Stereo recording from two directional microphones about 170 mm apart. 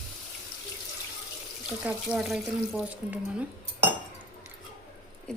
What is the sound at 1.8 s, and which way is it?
Speech, centre (ahead or behind).